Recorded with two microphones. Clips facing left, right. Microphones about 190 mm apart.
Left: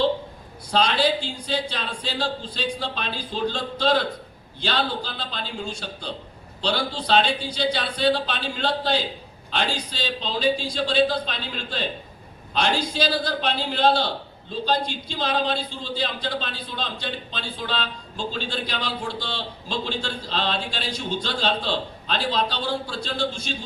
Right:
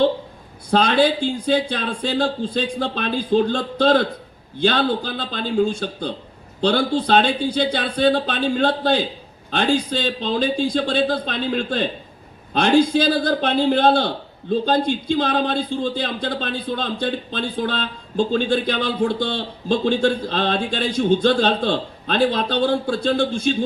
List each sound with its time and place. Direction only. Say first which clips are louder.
0.7 s a man's voice: right 5 dB; 55° right (ahead or behind)